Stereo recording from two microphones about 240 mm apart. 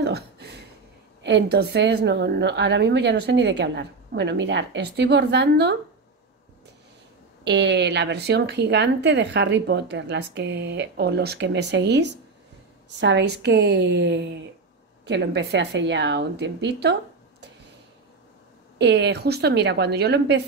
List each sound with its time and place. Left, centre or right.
0.0 s a sound: right
1.2 s speech: right
7.4 s speech: right
18.8 s speech: right